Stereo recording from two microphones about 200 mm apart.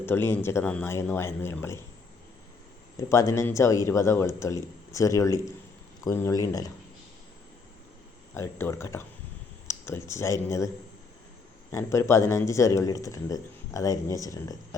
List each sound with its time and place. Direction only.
0.0 s speech: 10° left (ahead or behind)
3.1 s speech: 15° left (ahead or behind)
8.4 s speech: 10° left (ahead or behind)
11.7 s speech: 15° left (ahead or behind)